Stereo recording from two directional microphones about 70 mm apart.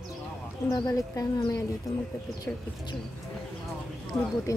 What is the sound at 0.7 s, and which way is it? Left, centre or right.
Speech, left.